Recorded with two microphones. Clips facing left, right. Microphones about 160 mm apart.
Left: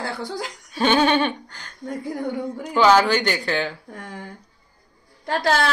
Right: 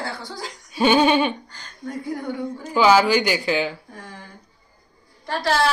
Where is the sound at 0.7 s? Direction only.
10° right (ahead or behind).